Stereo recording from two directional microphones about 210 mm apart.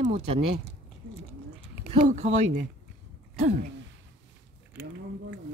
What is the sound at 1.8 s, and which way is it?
Speech, 35° right (ahead or behind).